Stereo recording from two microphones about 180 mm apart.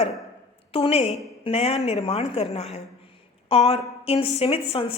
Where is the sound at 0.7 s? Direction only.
30° left (ahead or behind).